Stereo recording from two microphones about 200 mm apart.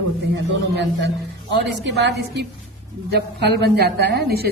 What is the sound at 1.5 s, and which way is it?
Speech, 60° right (ahead or behind).